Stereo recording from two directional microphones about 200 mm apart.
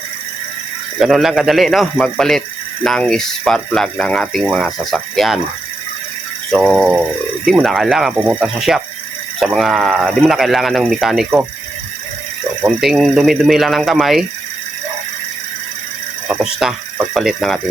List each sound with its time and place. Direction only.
0.9 s speech: centre (ahead or behind)
6.5 s speech: 5° right (ahead or behind)
12.6 s speech: centre (ahead or behind)
16.3 s speech: 5° right (ahead or behind)